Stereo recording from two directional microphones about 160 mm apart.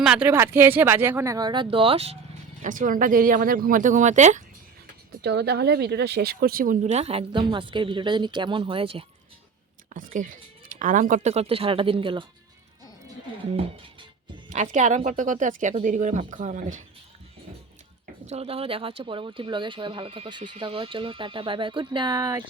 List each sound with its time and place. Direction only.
0.0 s speech: 5° right (ahead or behind); by 2.1 s 35° right (ahead or behind)
2.6 s speech: 55° right (ahead or behind)
5.2 s speech: 90° right; by 6.9 s 60° right (ahead or behind)
6.9 s speech: 40° right (ahead or behind)
9.9 s speech: 55° right (ahead or behind); by 12.2 s 35° right (ahead or behind)
14.5 s speech: 50° right (ahead or behind)
18.3 s speech: 40° right (ahead or behind); by 22.4 s 20° right (ahead or behind)